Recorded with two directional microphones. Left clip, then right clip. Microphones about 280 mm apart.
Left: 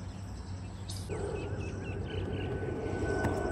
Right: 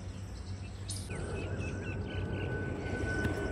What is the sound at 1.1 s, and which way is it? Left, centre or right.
Bird, left.